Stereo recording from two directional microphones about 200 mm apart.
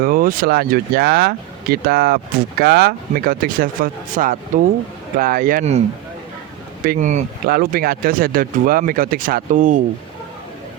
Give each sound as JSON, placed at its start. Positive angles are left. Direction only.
{"t": 0.0, "sound": "speech", "side_deg": -45}
{"t": 6.8, "sound": "speech", "side_deg": -40}